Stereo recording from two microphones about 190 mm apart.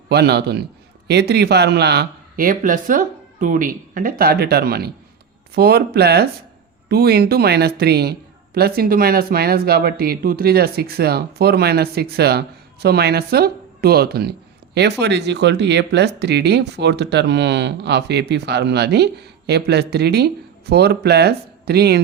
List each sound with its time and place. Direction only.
0.1 s speech: 60° right (ahead or behind)